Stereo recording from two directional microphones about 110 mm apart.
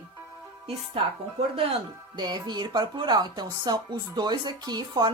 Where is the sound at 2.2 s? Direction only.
40° right (ahead or behind).